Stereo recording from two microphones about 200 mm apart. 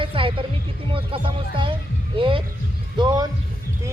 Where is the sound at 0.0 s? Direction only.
25° right (ahead or behind).